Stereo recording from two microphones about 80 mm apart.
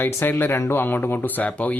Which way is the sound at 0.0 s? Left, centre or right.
Left.